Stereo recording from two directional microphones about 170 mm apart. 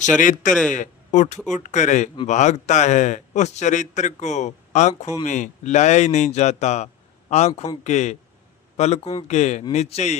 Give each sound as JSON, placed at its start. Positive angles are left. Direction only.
{"t": 0.2, "sound": "a man's voice", "side_deg": 50}